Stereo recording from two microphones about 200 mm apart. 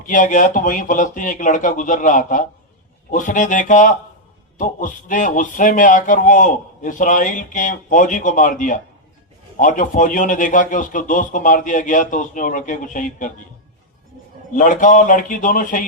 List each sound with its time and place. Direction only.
0.0 s a man's voice: 40° left (ahead or behind)
14.5 s a man's voice: 40° left (ahead or behind)